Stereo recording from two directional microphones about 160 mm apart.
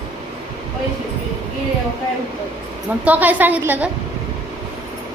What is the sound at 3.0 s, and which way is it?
Speech, 10° right (ahead or behind).